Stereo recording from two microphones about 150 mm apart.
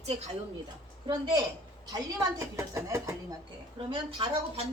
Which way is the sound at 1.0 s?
30° right (ahead or behind).